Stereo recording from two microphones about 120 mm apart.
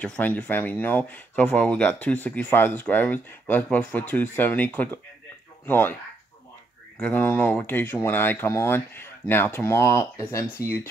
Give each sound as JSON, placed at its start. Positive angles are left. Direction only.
{"t": 0.0, "sound": "speech", "side_deg": 10}
{"t": 7.0, "sound": "speech", "side_deg": 15}